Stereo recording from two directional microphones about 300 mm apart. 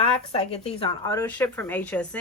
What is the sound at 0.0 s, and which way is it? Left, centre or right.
Speech, left.